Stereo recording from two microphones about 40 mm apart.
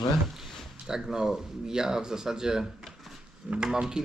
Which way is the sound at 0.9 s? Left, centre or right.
Centre.